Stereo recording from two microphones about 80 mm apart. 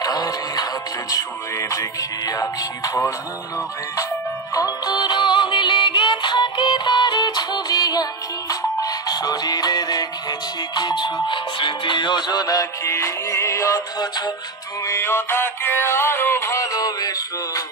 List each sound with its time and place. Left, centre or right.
0.0 s music: left
4.6 s music: left
4.9 s music: left
11.2 s music: left
14.9 s synthetic singing: left
16.4 s synthetic singing: left